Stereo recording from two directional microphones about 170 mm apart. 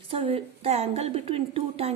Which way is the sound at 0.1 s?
35° right (ahead or behind).